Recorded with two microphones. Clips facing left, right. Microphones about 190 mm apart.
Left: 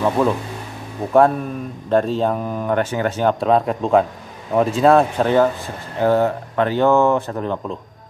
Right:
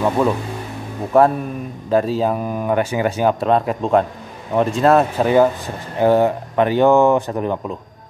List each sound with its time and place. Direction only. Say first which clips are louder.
0.2 s speech: even; centre (ahead or behind)